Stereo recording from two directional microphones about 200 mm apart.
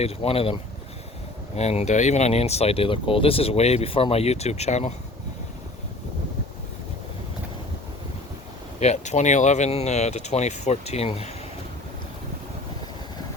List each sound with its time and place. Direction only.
0.0 s speech: 30° left (ahead or behind)
8.8 s speech: 35° left (ahead or behind)